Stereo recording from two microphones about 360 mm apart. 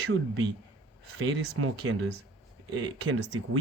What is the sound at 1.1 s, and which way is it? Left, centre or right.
Speech, right.